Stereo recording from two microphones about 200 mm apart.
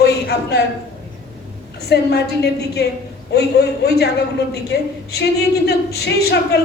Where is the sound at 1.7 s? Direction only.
55° left (ahead or behind).